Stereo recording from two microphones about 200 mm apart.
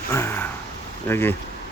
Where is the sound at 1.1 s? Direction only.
10° left (ahead or behind).